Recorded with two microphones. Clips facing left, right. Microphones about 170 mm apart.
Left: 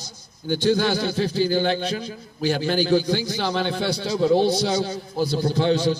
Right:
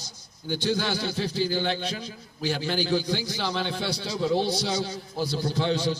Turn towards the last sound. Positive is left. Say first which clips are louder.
# left 5 dB
turn(degrees=50)  # may be behind; listen again after turning